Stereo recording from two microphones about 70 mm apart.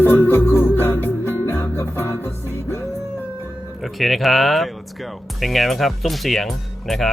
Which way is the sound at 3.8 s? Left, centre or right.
Centre.